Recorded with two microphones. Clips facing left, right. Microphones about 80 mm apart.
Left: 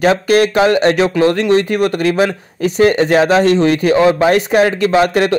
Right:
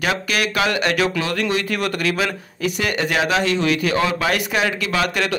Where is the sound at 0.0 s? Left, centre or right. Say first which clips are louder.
Left 10 dB; left.